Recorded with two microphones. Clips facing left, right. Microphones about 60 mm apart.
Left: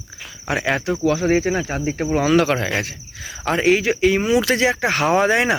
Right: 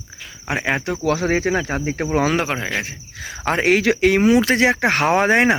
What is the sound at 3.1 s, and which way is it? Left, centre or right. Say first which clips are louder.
Cricket: right 1 dB; right.